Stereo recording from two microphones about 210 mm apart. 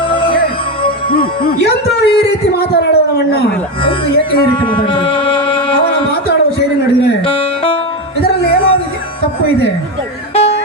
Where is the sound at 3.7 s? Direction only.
25° left (ahead or behind).